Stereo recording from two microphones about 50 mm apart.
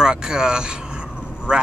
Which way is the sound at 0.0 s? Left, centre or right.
Centre.